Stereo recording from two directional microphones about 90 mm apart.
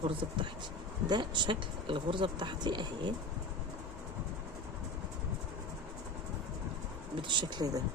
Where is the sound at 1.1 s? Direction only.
55° right (ahead or behind).